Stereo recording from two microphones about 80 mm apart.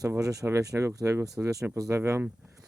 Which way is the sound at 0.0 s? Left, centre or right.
Right.